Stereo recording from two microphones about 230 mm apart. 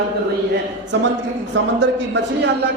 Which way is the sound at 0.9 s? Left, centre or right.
Right.